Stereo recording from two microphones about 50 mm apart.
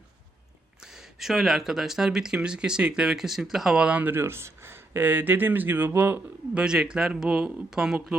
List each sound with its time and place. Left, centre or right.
0.8 s speech: centre
4.0 s speech: right
6.5 s speech: centre
7.7 s speech: centre